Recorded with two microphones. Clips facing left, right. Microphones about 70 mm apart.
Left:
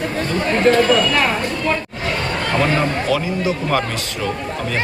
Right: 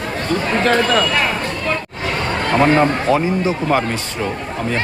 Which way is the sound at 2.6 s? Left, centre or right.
Right.